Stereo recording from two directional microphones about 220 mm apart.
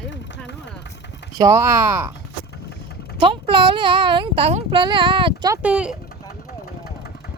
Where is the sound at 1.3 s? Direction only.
15° right (ahead or behind).